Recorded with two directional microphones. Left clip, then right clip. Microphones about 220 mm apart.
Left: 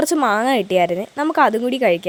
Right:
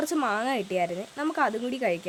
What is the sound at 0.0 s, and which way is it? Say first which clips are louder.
A woman's voice: left 10 dB; 30° left (ahead or behind).